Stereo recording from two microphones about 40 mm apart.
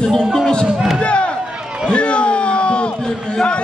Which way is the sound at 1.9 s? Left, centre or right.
Left.